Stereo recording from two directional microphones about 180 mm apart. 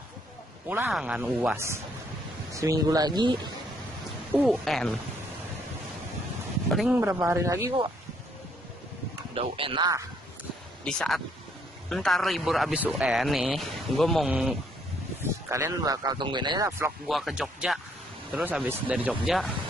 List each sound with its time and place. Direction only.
0.7 s speech: 10° right (ahead or behind)
4.3 s a man's voice: 5° right (ahead or behind)
6.7 s a man's voice: centre (ahead or behind)
7.0 s speech: 15° right (ahead or behind)
9.3 s speech: 30° right (ahead or behind)
10.8 s a man's voice: 5° left (ahead or behind)
15.4 s speech: 15° right (ahead or behind)
17.1 s a man's voice: centre (ahead or behind)